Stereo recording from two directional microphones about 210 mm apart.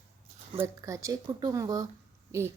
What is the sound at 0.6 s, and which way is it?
A woman's voice, 15° right (ahead or behind).